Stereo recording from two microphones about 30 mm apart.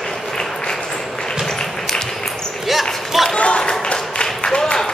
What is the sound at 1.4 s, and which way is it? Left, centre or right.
Applause, centre.